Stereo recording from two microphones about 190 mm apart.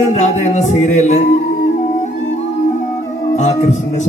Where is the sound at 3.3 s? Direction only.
40° left (ahead or behind).